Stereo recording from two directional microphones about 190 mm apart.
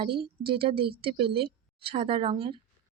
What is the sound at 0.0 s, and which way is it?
A woman's voice, 30° right (ahead or behind).